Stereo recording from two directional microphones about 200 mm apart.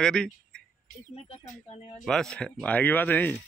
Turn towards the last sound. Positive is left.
turn(degrees=10)  # may be behind; listen again after turning